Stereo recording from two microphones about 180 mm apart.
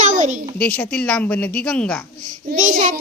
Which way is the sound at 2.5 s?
45° right (ahead or behind).